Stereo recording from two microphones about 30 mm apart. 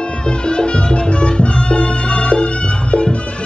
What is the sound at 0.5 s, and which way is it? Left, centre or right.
Music, left.